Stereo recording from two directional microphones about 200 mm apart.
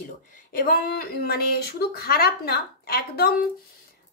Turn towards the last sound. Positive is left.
turn(degrees=50)  # may be behind; listen again after turning